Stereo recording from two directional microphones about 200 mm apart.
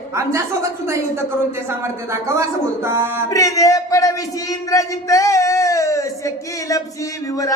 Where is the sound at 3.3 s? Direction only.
15° left (ahead or behind).